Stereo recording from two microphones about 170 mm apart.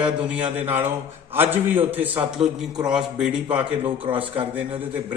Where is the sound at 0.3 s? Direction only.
10° right (ahead or behind).